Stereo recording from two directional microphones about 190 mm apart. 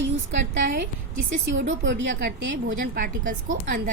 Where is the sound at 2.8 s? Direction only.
45° right (ahead or behind).